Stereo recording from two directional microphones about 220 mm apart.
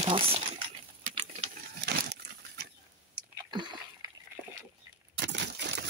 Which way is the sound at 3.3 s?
20° right (ahead or behind).